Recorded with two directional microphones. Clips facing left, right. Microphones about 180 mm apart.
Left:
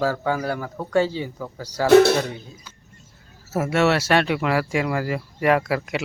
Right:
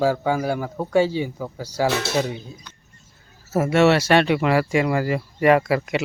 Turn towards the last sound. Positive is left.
turn(degrees=0)  # may be behind; listen again after turning